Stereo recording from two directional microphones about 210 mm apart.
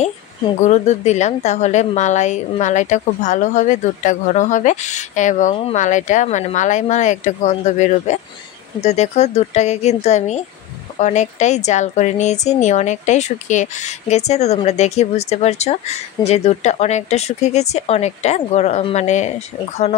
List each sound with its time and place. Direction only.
0.6 s a woman's voice: 35° left (ahead or behind)